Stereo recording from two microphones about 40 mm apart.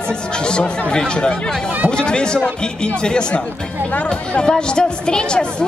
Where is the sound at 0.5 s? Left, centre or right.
Left.